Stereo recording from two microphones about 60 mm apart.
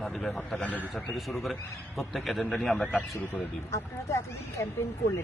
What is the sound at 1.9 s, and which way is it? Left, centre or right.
Speech, centre.